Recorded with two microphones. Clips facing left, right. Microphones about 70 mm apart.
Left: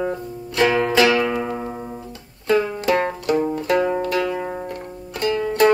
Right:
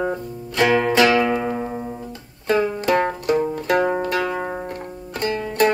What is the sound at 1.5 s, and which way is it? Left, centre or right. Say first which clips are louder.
Music: right 2 dB; centre.